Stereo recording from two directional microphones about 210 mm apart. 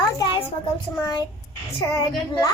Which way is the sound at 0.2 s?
20° left (ahead or behind).